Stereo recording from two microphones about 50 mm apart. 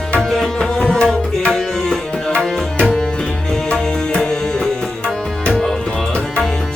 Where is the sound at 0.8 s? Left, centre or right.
Centre.